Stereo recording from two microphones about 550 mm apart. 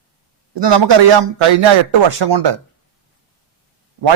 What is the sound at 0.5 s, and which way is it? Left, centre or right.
A man's voice, right.